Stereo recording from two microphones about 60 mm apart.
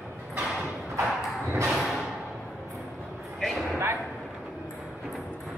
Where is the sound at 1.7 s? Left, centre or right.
Centre.